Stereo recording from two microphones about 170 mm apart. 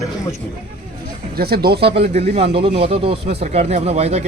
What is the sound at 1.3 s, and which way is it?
Speech, 65° right (ahead or behind).